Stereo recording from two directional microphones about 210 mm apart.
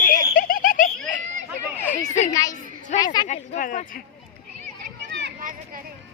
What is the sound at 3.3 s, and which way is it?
Speech, 40° left (ahead or behind).